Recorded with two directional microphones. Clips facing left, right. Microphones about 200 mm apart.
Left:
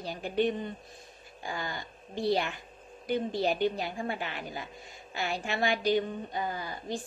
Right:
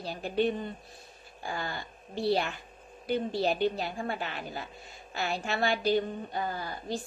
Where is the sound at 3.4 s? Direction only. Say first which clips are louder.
Even; 10° left (ahead or behind).